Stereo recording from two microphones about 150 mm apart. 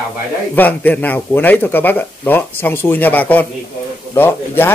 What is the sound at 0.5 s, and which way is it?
Speech, 10° left (ahead or behind).